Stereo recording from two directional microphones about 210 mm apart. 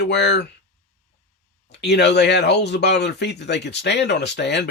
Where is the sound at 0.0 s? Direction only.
55° left (ahead or behind).